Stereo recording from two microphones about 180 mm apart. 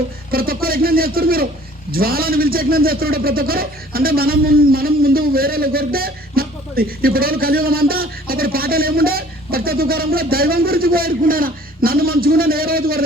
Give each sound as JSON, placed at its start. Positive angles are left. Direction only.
{"t": 0.3, "sound": "a man's voice", "side_deg": -55}